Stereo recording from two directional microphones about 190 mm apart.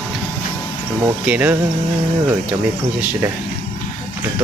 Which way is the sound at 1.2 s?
10° right (ahead or behind).